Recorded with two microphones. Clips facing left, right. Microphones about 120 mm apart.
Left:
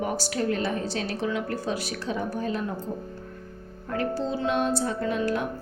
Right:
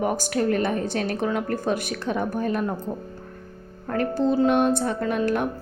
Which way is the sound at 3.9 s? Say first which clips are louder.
Right 5 dB; 50° right (ahead or behind).